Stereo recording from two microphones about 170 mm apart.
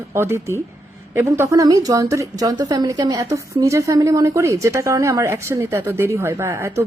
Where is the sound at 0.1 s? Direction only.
15° right (ahead or behind).